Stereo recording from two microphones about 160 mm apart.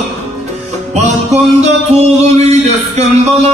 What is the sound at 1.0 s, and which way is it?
Music, 45° right (ahead or behind).